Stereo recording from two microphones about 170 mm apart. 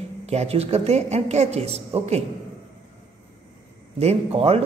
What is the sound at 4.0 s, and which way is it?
Speech, 35° right (ahead or behind).